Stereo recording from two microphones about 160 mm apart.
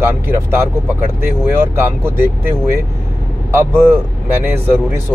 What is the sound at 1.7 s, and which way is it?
Speech, 15° right (ahead or behind).